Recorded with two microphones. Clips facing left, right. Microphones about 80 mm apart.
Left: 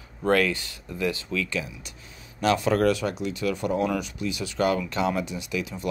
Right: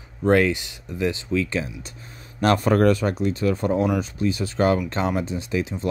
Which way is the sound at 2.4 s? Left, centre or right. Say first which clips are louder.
Right 3 dB; right.